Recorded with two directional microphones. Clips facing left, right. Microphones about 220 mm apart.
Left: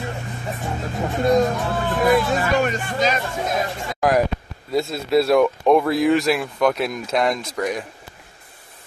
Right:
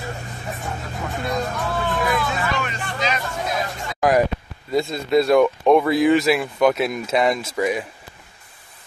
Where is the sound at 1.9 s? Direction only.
40° left (ahead or behind).